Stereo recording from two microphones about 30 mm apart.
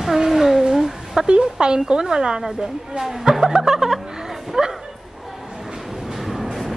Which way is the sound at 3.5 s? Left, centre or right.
Centre.